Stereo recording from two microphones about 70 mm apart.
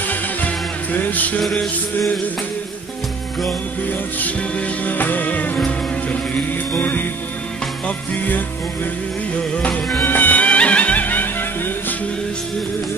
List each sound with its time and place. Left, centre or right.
0.9 s music: left
1.4 s music: centre
4.2 s music: centre
6.8 s music: left
9.6 s music: centre
10.0 s music: left